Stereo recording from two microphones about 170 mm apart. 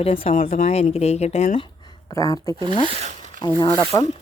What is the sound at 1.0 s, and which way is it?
Speech, 40° left (ahead or behind).